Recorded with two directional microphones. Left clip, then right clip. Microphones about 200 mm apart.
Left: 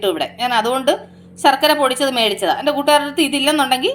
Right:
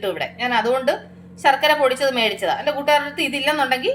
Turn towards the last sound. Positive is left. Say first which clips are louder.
# left 4 dB
turn(degrees=35)  # may be behind; listen again after turning